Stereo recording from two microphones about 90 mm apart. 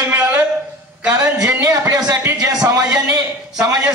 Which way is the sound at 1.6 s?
35° right (ahead or behind).